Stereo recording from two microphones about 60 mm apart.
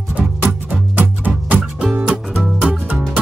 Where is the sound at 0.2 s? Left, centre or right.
Centre.